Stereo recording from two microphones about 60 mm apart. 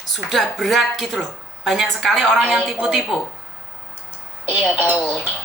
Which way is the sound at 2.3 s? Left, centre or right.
Centre.